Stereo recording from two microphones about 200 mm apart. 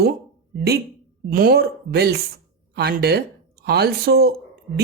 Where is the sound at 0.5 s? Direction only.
50° right (ahead or behind).